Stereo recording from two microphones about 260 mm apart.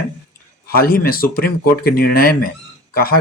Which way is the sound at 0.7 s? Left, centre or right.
Left.